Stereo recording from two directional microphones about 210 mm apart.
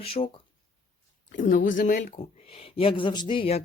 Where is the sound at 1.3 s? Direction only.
40° left (ahead or behind).